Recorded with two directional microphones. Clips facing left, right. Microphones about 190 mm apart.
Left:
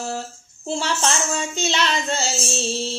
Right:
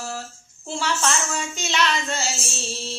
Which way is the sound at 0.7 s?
30° left (ahead or behind).